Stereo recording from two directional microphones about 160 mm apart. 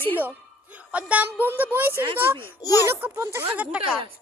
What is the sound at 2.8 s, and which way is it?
Speech, 15° right (ahead or behind).